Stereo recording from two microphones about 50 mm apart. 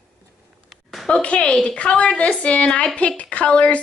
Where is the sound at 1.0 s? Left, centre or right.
Left.